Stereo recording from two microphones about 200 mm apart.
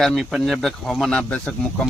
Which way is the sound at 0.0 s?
Centre (ahead or behind).